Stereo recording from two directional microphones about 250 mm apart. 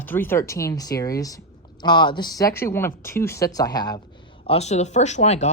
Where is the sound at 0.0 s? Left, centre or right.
Centre.